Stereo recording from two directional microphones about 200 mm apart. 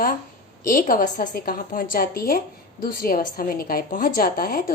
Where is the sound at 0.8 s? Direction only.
45° left (ahead or behind).